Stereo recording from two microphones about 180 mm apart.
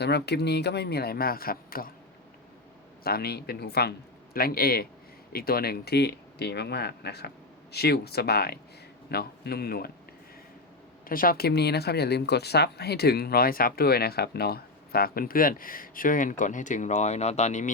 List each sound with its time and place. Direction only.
0.0 s speech: 65° left (ahead or behind)
3.0 s speech: 60° left (ahead or behind)
11.1 s speech: 50° left (ahead or behind)